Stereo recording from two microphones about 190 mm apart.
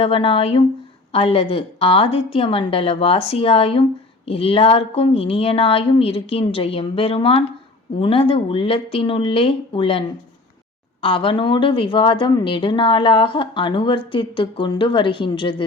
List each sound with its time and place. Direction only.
0.0 s a woman's voice: 30° left (ahead or behind)
11.0 s a woman's voice: 25° left (ahead or behind)